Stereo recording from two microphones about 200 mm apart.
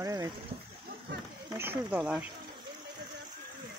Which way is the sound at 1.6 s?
10° right (ahead or behind).